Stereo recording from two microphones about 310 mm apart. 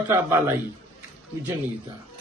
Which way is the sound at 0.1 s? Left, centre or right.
Centre.